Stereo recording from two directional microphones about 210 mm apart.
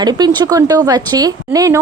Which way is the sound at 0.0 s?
20° right (ahead or behind).